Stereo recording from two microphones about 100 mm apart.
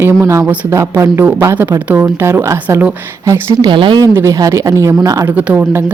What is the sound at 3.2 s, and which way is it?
Speech, 35° right (ahead or behind).